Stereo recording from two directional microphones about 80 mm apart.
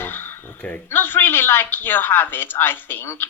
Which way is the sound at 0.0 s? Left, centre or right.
Left.